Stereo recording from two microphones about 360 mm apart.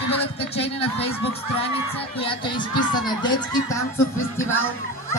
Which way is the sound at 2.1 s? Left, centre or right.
Centre.